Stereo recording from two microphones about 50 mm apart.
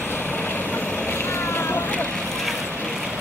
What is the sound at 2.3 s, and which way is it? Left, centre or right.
Boat, centre.